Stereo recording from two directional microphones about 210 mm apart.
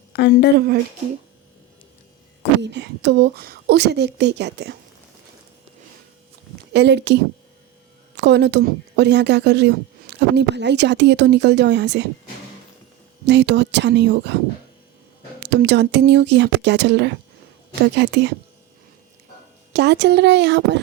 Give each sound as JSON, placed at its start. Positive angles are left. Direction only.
{"t": 0.1, "sound": "speech", "side_deg": 50}
{"t": 2.6, "sound": "a woman's voice", "side_deg": -55}
{"t": 6.7, "sound": "a woman's voice", "side_deg": -55}
{"t": 13.2, "sound": "speech", "side_deg": -55}
{"t": 15.4, "sound": "speech", "side_deg": -55}
{"t": 19.7, "sound": "speech", "side_deg": -55}